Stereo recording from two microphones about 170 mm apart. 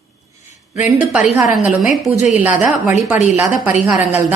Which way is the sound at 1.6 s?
Centre (ahead or behind).